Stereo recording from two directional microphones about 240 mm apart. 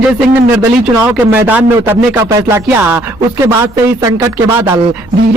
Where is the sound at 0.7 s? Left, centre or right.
Centre.